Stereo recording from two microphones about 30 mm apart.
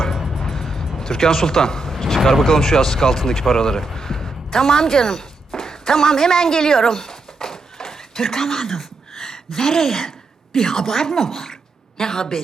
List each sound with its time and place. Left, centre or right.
0.2 s music: centre
0.4 s music: centre
2.5 s speech: centre
5.5 s a sound: centre
9.6 s speech: centre